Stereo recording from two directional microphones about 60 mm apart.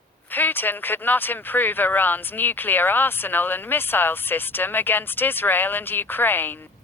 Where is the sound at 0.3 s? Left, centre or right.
Left.